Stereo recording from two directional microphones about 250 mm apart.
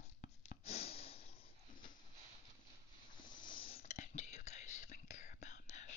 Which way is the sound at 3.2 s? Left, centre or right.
Centre.